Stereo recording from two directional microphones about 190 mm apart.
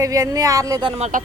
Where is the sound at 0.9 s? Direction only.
35° right (ahead or behind).